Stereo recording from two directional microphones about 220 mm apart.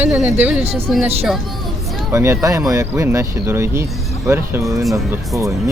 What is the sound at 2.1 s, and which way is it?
Speech, 15° right (ahead or behind).